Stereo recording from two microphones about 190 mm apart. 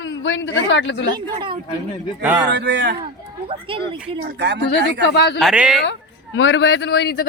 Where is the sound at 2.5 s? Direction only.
65° right (ahead or behind).